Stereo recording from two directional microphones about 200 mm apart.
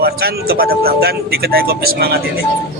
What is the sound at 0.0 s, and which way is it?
Speech, 50° right (ahead or behind).